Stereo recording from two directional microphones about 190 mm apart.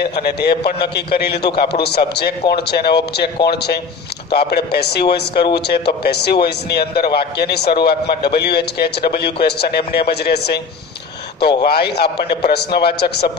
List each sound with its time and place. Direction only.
0.0 s a man's voice: 60° left (ahead or behind)